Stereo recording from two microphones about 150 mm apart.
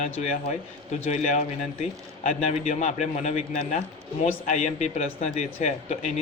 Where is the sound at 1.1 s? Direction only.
55° left (ahead or behind).